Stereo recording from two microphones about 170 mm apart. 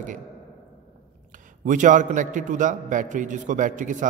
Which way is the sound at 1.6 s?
50° right (ahead or behind).